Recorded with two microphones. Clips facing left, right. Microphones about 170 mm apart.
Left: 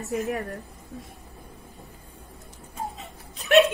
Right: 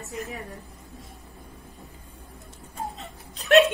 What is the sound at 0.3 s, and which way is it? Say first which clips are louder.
Speech: left 8 dB; 70° left (ahead or behind).